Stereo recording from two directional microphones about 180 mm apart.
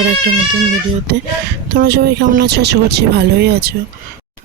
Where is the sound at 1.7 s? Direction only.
60° right (ahead or behind).